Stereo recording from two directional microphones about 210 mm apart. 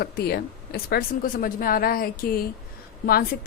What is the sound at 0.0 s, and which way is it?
A woman's voice, 50° left (ahead or behind).